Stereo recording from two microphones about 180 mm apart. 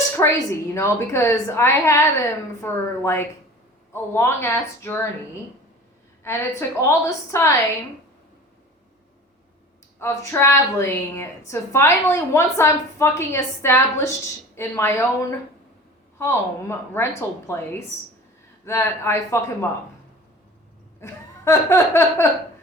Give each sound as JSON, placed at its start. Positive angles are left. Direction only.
{"t": 0.2, "sound": "a woman's voice", "side_deg": 15}
{"t": 6.2, "sound": "a woman's voice", "side_deg": 15}
{"t": 10.0, "sound": "a woman's voice", "side_deg": 15}
{"t": 21.0, "sound": "laughter", "side_deg": 15}